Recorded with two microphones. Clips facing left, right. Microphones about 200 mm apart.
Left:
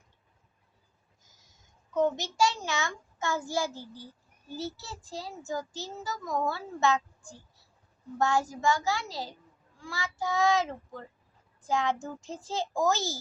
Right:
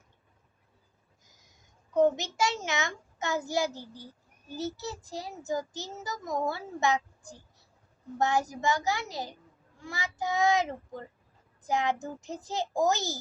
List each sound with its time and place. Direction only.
2.1 s a child's voice: 20° right (ahead or behind)